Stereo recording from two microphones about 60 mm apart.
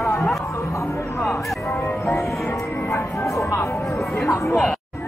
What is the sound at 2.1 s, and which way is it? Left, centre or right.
Music, left.